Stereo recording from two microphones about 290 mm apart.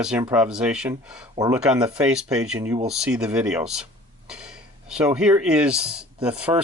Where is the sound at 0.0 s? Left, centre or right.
Centre.